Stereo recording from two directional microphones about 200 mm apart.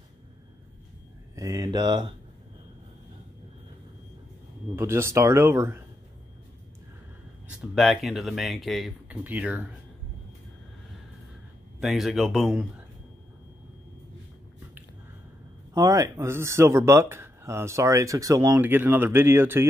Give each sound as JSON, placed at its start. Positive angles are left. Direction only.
{"t": 1.3, "sound": "speech", "side_deg": -15}
{"t": 4.7, "sound": "speech", "side_deg": -15}
{"t": 7.4, "sound": "speech", "side_deg": 0}
{"t": 11.8, "sound": "speech", "side_deg": 0}
{"t": 15.7, "sound": "speech", "side_deg": -20}